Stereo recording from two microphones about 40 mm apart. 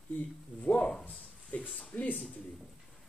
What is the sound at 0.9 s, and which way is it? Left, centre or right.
Speech, centre.